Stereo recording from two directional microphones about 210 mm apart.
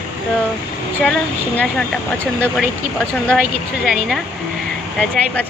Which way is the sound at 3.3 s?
5° right (ahead or behind).